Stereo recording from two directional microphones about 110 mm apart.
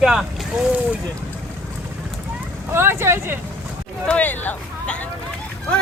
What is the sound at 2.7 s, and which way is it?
Speech, 20° right (ahead or behind).